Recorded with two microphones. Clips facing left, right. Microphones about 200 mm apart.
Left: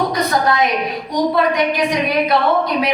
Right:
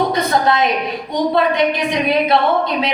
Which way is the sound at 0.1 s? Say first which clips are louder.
Right 1 dB; 25° right (ahead or behind).